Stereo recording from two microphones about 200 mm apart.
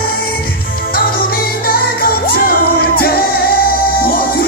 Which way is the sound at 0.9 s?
45° left (ahead or behind).